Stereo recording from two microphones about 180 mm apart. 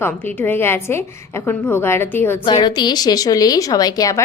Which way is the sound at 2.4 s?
25° left (ahead or behind).